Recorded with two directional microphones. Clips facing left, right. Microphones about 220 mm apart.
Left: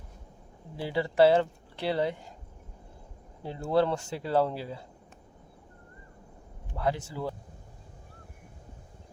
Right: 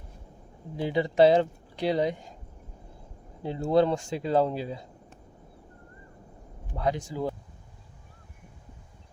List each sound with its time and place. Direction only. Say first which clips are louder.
0.8 s speech: right 2 dB; 20° right (ahead or behind)
3.4 s speech: right 3 dB; 20° right (ahead or behind)
6.7 s speech: right 2 dB; 20° right (ahead or behind)